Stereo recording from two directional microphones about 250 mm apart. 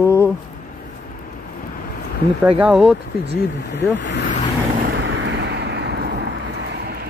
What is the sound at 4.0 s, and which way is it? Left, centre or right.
Speech, left.